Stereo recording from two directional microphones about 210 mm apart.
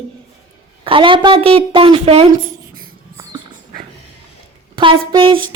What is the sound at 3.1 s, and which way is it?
Dog, 20° right (ahead or behind).